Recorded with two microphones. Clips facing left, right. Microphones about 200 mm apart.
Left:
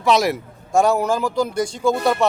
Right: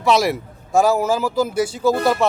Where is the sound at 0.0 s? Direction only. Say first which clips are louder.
Even; centre (ahead or behind).